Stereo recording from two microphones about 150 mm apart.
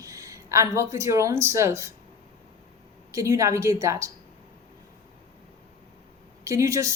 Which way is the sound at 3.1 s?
20° right (ahead or behind).